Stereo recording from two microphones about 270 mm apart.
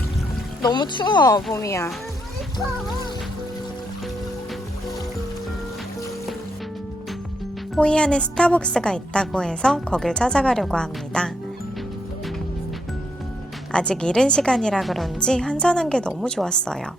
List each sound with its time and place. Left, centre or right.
0.6 s speech: centre
7.8 s a woman's voice: centre
13.7 s a woman's voice: centre